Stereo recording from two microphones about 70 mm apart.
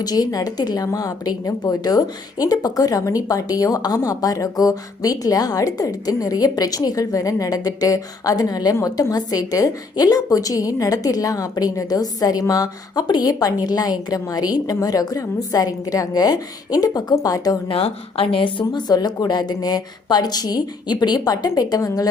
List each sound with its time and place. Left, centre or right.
0.0 s a woman's voice: left
0.9 s a woman's voice: left
8.7 s a woman's voice: left
18.7 s a woman's voice: left